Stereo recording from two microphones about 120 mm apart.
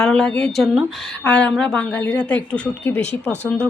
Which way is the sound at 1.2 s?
10° left (ahead or behind).